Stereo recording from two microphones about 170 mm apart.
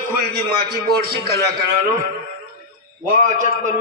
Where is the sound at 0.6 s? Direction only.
65° right (ahead or behind).